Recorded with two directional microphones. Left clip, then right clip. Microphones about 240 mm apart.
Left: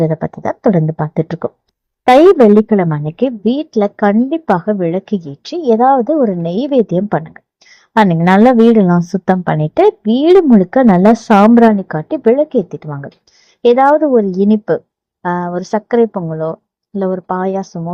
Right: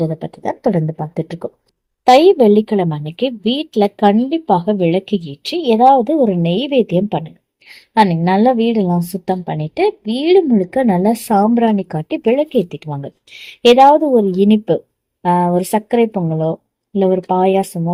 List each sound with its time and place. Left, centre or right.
0.0 s speech: left
3.1 s a woman's voice: left
3.8 s speech: left
12.2 s a woman's voice: left
13.7 s speech: left